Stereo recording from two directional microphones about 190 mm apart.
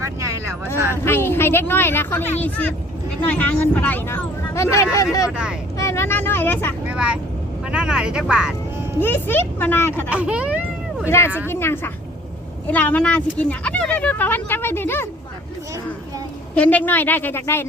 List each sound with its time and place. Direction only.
0.0 s vehicle: 15° right (ahead or behind)
1.0 s speech: 10° left (ahead or behind)
5.7 s vehicle: 15° left (ahead or behind)
6.8 s vehicle: 5° right (ahead or behind)
7.7 s speech: 5° right (ahead or behind)
9.0 s speech: 10° left (ahead or behind)
10.1 s speech: 5° right (ahead or behind)
11.4 s speech: 10° left (ahead or behind)
16.6 s speech: 10° left (ahead or behind)